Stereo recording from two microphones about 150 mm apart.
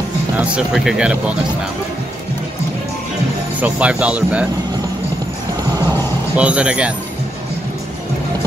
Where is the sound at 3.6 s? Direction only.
10° right (ahead or behind).